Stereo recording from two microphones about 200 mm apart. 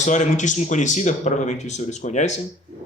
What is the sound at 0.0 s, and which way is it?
Speech, 35° left (ahead or behind).